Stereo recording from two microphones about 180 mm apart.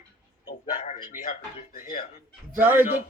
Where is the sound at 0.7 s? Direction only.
45° left (ahead or behind).